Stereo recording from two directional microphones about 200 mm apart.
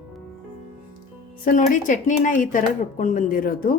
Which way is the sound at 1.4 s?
40° left (ahead or behind).